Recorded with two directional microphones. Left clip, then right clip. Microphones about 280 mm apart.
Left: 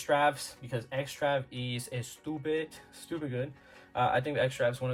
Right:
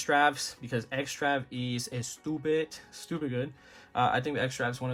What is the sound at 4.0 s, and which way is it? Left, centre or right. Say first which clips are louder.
Speech: even; centre.